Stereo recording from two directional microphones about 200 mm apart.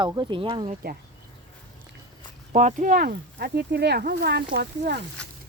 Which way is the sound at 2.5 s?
40° right (ahead or behind).